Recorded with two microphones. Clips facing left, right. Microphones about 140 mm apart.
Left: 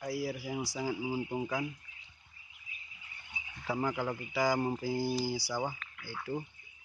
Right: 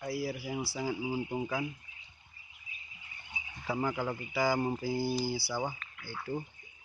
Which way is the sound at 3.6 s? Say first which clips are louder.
Even; 5° right (ahead or behind).